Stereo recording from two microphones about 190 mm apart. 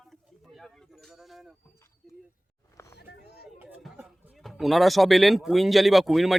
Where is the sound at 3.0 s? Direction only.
60° left (ahead or behind).